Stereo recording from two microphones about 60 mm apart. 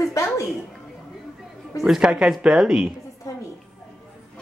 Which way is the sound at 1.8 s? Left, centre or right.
Centre.